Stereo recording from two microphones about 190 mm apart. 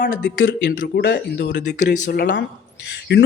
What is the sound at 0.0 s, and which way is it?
Speech, 70° left (ahead or behind).